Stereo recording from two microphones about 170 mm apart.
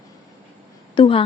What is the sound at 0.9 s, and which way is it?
Speech, 30° left (ahead or behind).